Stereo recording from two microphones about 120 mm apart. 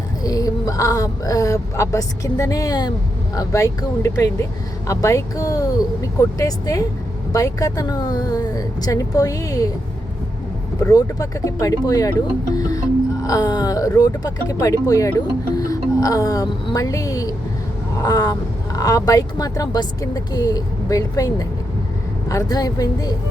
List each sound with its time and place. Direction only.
0.2 s speech: 30° left (ahead or behind)
10.9 s speech: 30° left (ahead or behind)